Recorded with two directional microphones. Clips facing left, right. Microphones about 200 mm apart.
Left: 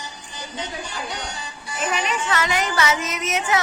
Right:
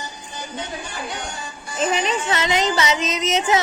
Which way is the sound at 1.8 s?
30° right (ahead or behind).